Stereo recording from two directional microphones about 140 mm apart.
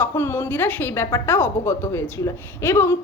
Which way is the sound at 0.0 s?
15° left (ahead or behind).